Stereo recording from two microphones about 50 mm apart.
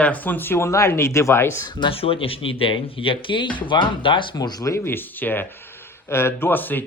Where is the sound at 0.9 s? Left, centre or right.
Left.